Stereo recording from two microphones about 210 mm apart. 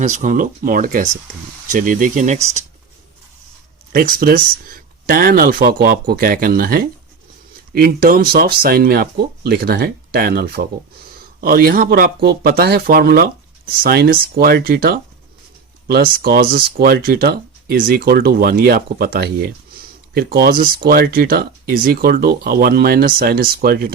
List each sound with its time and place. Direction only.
0.0 s speech: 35° right (ahead or behind)
3.9 s speech: 40° right (ahead or behind)